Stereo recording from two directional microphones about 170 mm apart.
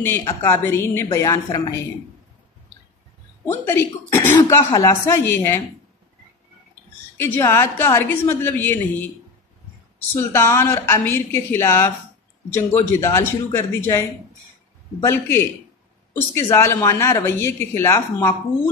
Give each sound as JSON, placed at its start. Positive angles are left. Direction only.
{"t": 0.2, "sound": "a woman's voice", "side_deg": 15}
{"t": 3.4, "sound": "a woman's voice", "side_deg": 15}
{"t": 7.2, "sound": "a woman's voice", "side_deg": 10}
{"t": 10.3, "sound": "a woman's voice", "side_deg": 15}